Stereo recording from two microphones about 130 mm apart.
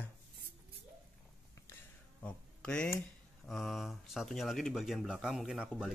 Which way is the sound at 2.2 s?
10° left (ahead or behind).